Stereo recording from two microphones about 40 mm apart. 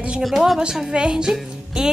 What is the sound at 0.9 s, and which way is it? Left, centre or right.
Speech, right.